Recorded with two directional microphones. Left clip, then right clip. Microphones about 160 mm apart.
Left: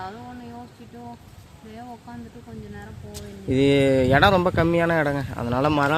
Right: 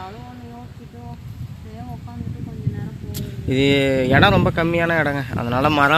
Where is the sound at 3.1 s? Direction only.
Centre (ahead or behind).